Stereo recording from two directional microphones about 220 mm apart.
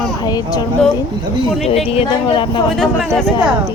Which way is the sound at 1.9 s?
25° left (ahead or behind).